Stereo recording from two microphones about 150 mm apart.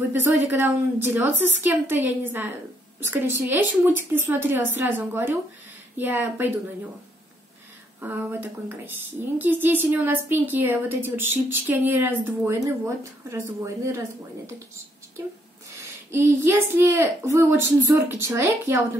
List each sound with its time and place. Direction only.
0.1 s a woman's voice: 10° right (ahead or behind)
8.0 s a woman's voice: 10° right (ahead or behind)
16.1 s a woman's voice: 15° right (ahead or behind)